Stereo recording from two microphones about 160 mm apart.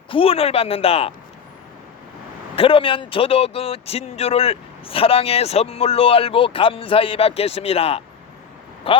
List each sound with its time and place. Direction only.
0.1 s speech: 35° left (ahead or behind)
2.6 s speech: 35° left (ahead or behind)